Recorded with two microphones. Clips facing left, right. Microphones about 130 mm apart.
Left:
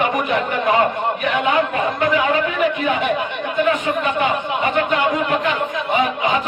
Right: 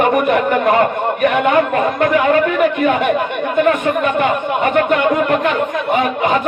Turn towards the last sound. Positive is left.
turn(degrees=-50)  # may be behind; listen again after turning